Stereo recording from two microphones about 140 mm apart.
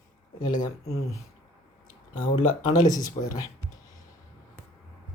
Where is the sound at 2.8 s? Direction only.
70° left (ahead or behind).